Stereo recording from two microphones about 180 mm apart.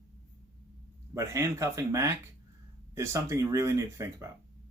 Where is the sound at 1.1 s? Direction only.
15° right (ahead or behind).